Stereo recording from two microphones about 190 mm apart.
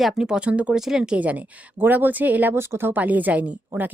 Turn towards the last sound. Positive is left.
turn(degrees=-10)  # may be behind; listen again after turning